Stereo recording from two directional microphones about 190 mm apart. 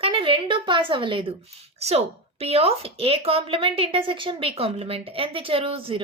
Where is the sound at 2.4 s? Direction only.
30° right (ahead or behind).